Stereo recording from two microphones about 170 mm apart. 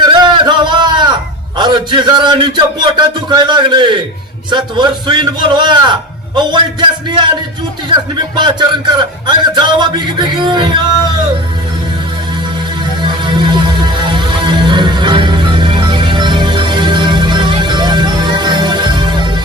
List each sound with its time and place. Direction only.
0.0 s a sound: 25° right (ahead or behind)
1.5 s a man's voice: 25° right (ahead or behind)
8.4 s a man's voice: 25° right (ahead or behind)
13.0 s music: 25° right (ahead or behind)